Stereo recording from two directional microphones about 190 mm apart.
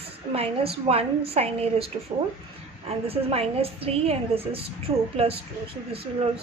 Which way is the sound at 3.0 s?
30° right (ahead or behind).